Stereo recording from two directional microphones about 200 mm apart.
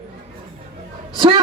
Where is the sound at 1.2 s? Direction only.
25° right (ahead or behind).